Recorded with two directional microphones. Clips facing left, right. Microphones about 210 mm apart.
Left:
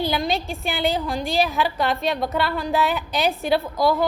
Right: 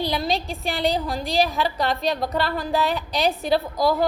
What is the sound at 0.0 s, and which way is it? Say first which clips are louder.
A woman's voice: left 1 dB; centre (ahead or behind).